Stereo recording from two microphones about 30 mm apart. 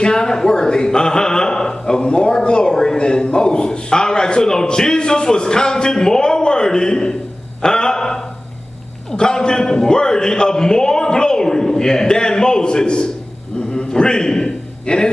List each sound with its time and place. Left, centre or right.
0.0 s a man's voice: left
7.6 s a sound: left
9.1 s a man's voice: left